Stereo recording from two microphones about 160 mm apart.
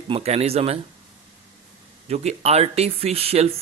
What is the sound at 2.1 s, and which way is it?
Speech, 40° right (ahead or behind).